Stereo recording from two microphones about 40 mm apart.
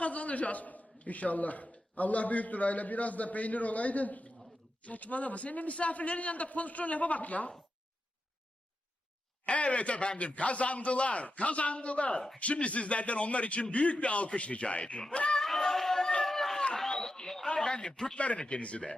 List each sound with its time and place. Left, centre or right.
0.0 s a man's voice: left
9.5 s a man's voice: left
15.4 s a sound: centre
16.2 s run: centre
16.7 s a sound: centre
17.7 s speech: left
18.2 s a man's voice: left